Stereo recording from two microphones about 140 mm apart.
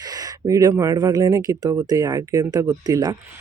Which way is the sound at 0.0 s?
25° right (ahead or behind).